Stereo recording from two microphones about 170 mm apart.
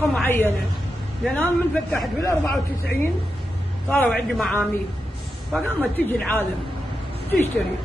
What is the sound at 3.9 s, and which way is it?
A man's voice, 5° left (ahead or behind).